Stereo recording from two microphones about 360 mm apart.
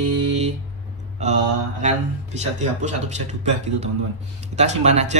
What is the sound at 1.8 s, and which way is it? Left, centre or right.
A man's voice, centre.